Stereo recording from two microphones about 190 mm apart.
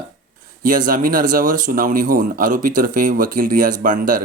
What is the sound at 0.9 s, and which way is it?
Speech, 45° right (ahead or behind).